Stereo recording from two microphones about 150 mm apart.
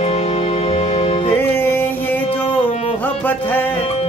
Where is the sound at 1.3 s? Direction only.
15° left (ahead or behind).